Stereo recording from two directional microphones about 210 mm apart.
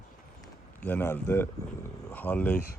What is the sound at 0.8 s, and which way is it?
Speech, 10° left (ahead or behind).